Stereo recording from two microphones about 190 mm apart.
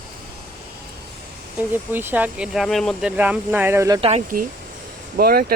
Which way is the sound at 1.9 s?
10° right (ahead or behind).